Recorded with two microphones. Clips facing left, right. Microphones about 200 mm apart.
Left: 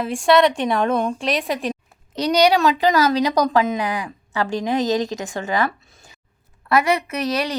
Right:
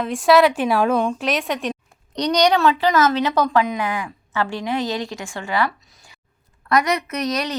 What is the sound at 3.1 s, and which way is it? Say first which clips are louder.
A woman's voice: left 1 dB; 40° left (ahead or behind).